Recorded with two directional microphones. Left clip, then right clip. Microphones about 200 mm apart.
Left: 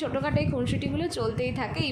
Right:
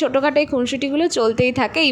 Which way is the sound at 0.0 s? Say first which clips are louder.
Right 12 dB; 35° right (ahead or behind).